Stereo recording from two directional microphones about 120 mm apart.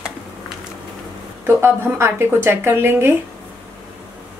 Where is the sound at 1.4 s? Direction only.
20° right (ahead or behind).